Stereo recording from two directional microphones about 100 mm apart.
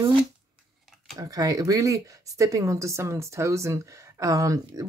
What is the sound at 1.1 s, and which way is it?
Speech, 35° right (ahead or behind).